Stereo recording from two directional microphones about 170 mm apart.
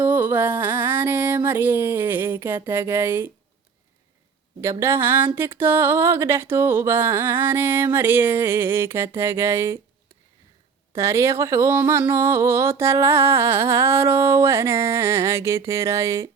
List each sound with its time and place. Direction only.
0.0 s a sound: 10° right (ahead or behind)
2.6 s speech: 15° right (ahead or behind)
4.6 s speech: 15° right (ahead or behind)
10.9 s speech: 15° right (ahead or behind)